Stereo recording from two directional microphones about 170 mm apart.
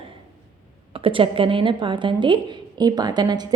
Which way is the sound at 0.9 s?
30° right (ahead or behind).